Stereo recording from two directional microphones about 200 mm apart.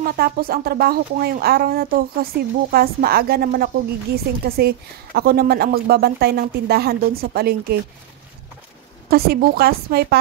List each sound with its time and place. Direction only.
0.0 s speech: 50° right (ahead or behind)
9.1 s speech: 50° right (ahead or behind)